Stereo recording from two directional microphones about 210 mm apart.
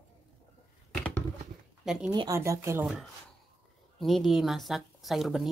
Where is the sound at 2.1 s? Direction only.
15° right (ahead or behind).